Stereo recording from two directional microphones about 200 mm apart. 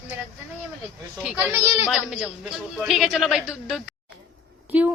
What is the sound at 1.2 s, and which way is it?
A child's voice, 5° right (ahead or behind).